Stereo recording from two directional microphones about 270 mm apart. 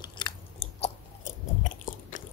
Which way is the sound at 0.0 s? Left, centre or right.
Centre.